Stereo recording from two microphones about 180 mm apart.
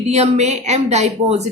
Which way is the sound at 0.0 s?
35° right (ahead or behind).